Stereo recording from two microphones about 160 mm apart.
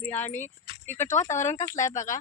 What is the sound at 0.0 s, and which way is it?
Speech, 10° left (ahead or behind).